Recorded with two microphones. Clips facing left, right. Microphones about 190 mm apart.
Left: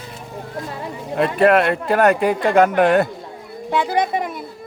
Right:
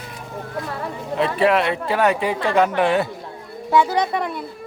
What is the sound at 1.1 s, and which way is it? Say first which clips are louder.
Speech: left 3 dB; 50° left (ahead or behind).